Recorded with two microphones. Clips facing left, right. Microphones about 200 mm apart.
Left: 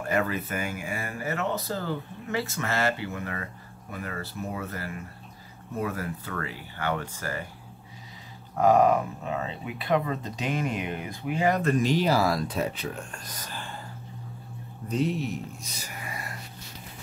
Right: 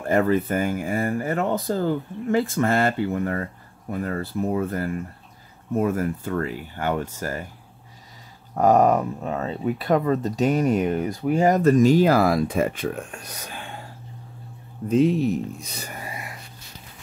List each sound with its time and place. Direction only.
0.0 s speech: 30° right (ahead or behind)
0.3 s speech: 50° right (ahead or behind)
3.1 s speech: 40° right (ahead or behind)
4.2 s speech: 55° right (ahead or behind)
8.5 s speech: 40° right (ahead or behind)
14.9 s speech: 90° right
15.7 s a sound: 55° right (ahead or behind)